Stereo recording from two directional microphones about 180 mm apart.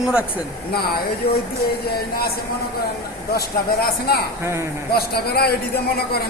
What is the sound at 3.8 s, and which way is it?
Speech, 60° left (ahead or behind).